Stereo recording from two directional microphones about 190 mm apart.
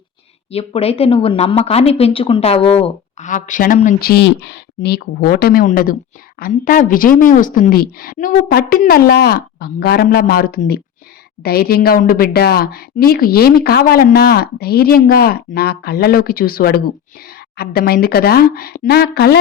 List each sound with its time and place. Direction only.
0.5 s speech: 30° left (ahead or behind)
4.0 s speech: 60° left (ahead or behind)